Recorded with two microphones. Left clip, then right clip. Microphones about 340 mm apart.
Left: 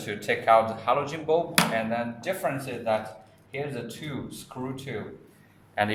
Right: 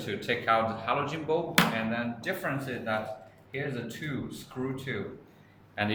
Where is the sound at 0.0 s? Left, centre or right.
Centre.